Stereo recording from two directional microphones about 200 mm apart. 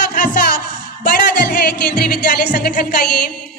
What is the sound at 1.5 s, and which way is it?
Music, 45° left (ahead or behind).